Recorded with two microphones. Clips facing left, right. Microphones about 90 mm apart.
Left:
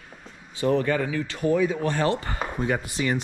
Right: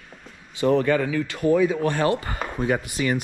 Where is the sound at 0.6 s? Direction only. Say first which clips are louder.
Right 3 dB; 55° right (ahead or behind).